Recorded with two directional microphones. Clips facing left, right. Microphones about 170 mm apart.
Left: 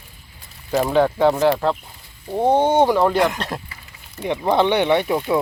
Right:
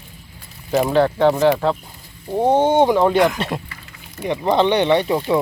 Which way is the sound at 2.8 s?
15° right (ahead or behind).